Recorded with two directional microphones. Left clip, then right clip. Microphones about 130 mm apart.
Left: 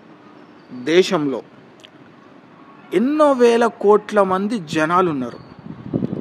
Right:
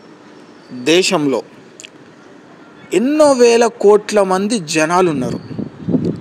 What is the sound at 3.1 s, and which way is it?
A man's voice, 20° right (ahead or behind).